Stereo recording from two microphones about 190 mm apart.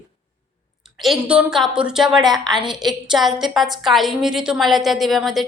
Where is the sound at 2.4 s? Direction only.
25° right (ahead or behind).